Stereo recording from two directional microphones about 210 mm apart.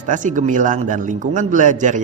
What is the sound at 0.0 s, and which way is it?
Speech, 35° right (ahead or behind).